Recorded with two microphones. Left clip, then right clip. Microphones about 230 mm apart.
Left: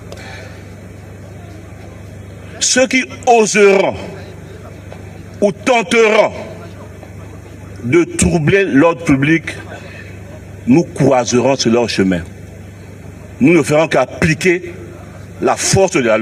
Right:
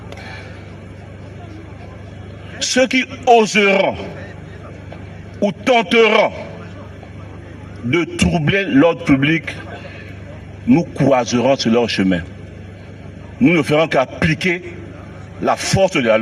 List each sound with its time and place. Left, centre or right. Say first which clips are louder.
2.7 s a man's voice: left 1 dB; left
5.4 s a man's voice: left 2 dB; left
7.9 s a man's voice: left 4 dB; left
13.4 s a man's voice: left 3 dB; left